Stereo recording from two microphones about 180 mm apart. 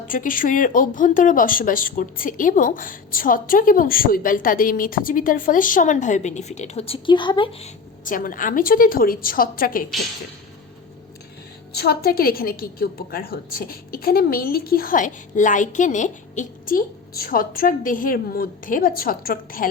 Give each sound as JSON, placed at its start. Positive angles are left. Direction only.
{"t": 0.1, "sound": "a woman's voice", "side_deg": 50}
{"t": 8.0, "sound": "a woman's voice", "side_deg": 50}
{"t": 11.7, "sound": "a woman's voice", "side_deg": 60}